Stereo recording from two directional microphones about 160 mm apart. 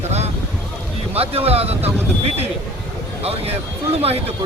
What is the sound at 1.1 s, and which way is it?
Speech, 40° right (ahead or behind).